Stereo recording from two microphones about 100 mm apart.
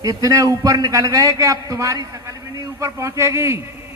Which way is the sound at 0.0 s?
35° right (ahead or behind).